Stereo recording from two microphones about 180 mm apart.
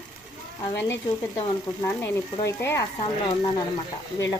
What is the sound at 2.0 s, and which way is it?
Speech, 15° left (ahead or behind).